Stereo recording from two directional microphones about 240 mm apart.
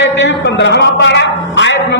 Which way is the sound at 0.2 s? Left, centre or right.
Left.